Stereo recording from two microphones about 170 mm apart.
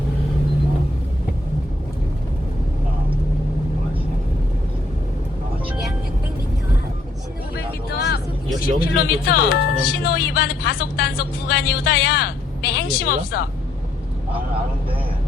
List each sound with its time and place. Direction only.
7.5 s vehicle: 65° left (ahead or behind)
8.6 s speech: 60° left (ahead or behind)